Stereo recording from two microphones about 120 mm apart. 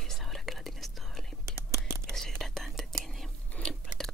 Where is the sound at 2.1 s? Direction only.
5° left (ahead or behind).